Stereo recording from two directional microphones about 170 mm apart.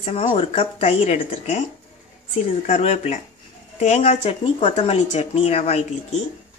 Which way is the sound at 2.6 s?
40° left (ahead or behind).